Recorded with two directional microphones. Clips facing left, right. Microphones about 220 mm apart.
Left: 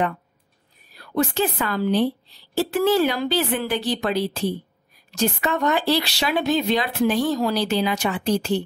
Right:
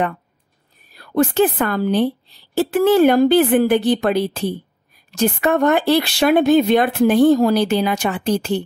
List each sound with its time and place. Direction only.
0.9 s a woman's voice: 50° right (ahead or behind)